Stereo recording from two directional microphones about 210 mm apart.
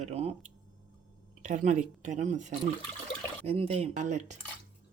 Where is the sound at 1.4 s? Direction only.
35° right (ahead or behind).